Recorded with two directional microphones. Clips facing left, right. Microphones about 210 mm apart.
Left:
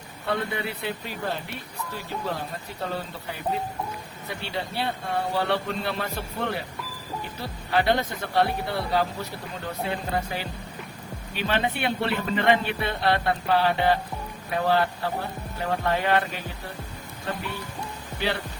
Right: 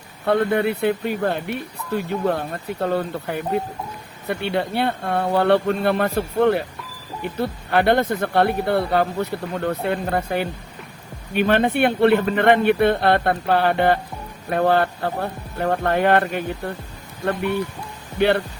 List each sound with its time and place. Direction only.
0.3 s speech: 55° right (ahead or behind)
18.2 s speech: 60° right (ahead or behind)